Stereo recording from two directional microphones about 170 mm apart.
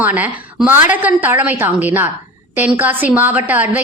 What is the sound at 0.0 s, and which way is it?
A woman's voice, 10° right (ahead or behind).